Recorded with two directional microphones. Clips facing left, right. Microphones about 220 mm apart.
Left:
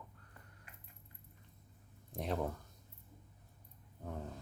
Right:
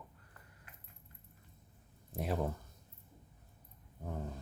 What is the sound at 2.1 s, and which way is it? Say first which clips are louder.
Speech: right 1 dB; 5° right (ahead or behind).